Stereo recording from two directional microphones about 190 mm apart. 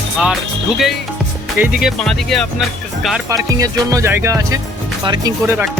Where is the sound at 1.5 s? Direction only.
5° right (ahead or behind).